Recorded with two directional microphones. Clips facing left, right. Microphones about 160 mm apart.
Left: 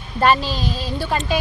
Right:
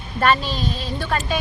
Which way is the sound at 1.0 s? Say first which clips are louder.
Left 1 dB; 20° left (ahead or behind).